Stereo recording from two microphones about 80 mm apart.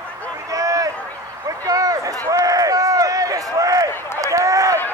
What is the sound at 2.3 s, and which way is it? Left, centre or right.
Run, right.